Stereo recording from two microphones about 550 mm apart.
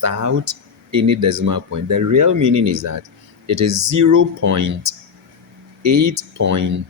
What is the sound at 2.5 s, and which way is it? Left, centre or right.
Speech, right.